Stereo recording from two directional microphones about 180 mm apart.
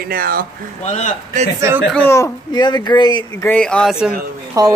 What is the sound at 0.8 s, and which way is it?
Speech, 40° left (ahead or behind).